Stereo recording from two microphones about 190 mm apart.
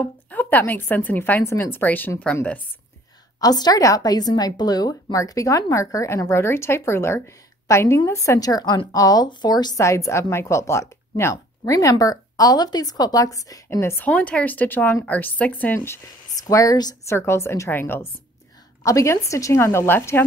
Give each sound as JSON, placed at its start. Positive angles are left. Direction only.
{"t": 0.0, "sound": "a woman's voice", "side_deg": 10}
{"t": 3.3, "sound": "a woman's voice", "side_deg": 20}